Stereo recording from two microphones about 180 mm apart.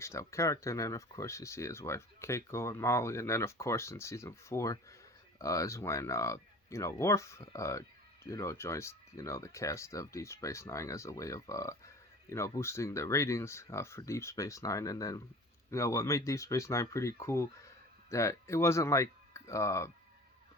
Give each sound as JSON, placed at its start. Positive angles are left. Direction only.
{"t": 0.0, "sound": "speech", "side_deg": 15}